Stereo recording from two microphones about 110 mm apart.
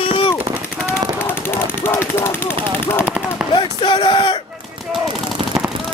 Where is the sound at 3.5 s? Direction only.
50° left (ahead or behind).